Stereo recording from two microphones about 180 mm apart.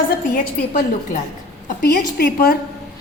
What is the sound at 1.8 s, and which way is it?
Speech, 60° left (ahead or behind).